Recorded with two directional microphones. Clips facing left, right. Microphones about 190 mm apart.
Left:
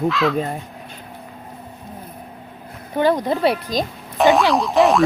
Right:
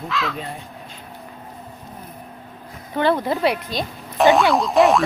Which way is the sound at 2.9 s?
15° left (ahead or behind).